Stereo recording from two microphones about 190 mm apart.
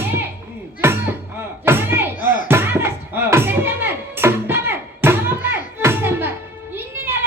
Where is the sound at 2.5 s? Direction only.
10° right (ahead or behind).